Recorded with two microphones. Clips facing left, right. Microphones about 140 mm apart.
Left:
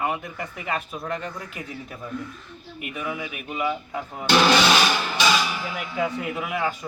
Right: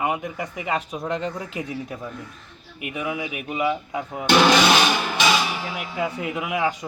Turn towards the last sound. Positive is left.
turn(degrees=-15)  # may be behind; listen again after turning